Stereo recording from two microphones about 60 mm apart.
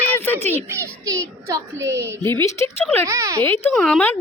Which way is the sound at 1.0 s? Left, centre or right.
Right.